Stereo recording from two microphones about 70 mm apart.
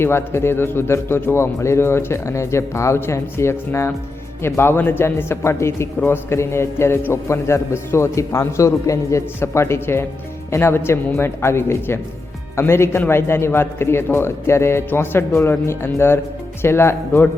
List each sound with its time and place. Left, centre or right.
0.0 s a man's voice: left